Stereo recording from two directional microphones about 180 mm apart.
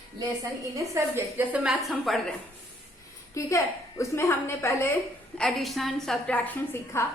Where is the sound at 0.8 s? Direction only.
15° right (ahead or behind).